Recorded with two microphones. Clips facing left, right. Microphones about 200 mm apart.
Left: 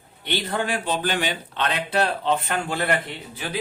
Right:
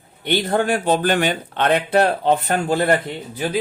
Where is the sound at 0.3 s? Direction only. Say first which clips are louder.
Right 7 dB; 45° right (ahead or behind).